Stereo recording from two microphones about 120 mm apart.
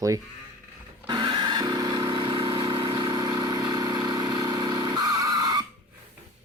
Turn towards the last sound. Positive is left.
turn(degrees=-35)  # may be behind; listen again after turning